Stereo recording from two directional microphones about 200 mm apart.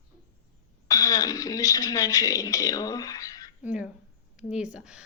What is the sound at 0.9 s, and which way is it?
Speech, 15° left (ahead or behind).